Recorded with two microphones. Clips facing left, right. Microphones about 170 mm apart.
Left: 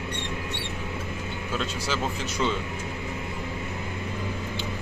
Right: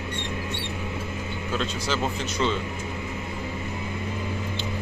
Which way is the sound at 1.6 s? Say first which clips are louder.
Right 2 dB; 5° left (ahead or behind).